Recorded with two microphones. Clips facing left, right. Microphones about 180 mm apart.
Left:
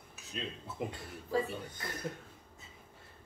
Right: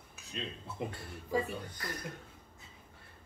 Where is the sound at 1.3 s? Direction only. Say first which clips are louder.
Even; 15° right (ahead or behind).